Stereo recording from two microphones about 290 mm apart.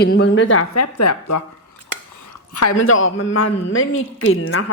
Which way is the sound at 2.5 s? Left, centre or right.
Left.